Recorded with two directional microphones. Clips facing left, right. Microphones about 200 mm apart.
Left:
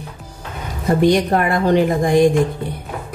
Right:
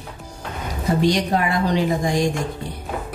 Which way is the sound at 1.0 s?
55° left (ahead or behind).